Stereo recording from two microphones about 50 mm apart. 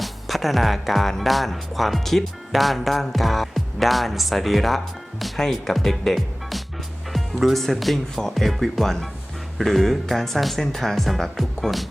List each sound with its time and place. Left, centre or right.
0.0 s speech: centre